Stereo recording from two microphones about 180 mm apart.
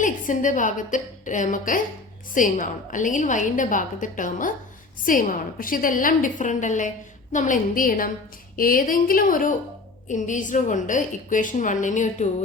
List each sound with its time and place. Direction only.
0.0 s a woman's voice: 45° left (ahead or behind)